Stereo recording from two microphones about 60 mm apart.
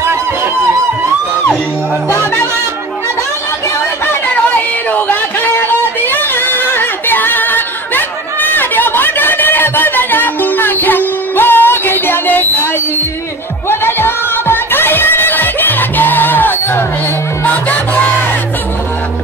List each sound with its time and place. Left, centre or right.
4.0 s a sound: left
5.7 s singing: left
13.7 s music: left